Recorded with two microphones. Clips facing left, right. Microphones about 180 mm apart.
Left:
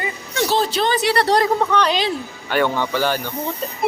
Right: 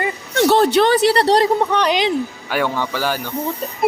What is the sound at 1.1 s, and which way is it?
Speech, 35° right (ahead or behind).